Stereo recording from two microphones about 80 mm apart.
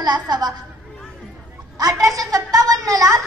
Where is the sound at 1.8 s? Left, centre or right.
Right.